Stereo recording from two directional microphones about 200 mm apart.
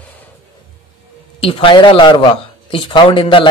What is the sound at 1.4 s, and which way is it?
Speech, 25° left (ahead or behind).